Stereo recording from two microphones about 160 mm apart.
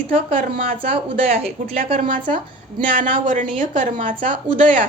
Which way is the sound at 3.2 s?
55° right (ahead or behind).